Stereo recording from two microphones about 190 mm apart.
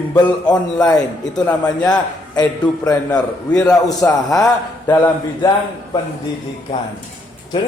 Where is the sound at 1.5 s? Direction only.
20° left (ahead or behind).